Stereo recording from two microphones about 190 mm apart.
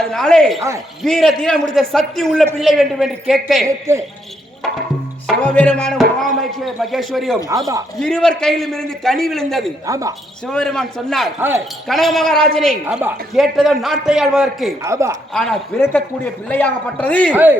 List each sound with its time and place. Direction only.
0.1 s a man's voice: 5° left (ahead or behind)
3.9 s a woman's voice: 10° right (ahead or behind)
5.4 s a man's voice: 5° left (ahead or behind)
9.8 s a woman's voice: 15° right (ahead or behind)
10.4 s a man's voice: 5° left (ahead or behind)
11.3 s a woman's voice: 10° right (ahead or behind)
11.9 s a man's voice: centre (ahead or behind)
12.8 s a woman's voice: 10° right (ahead or behind)
14.8 s a woman's voice: 15° right (ahead or behind)
15.3 s a man's voice: 5° left (ahead or behind)
17.3 s a woman's voice: 10° right (ahead or behind)